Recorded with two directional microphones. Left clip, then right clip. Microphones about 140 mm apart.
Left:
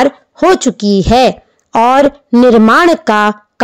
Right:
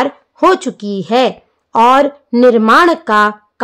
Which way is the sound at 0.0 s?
35° left (ahead or behind).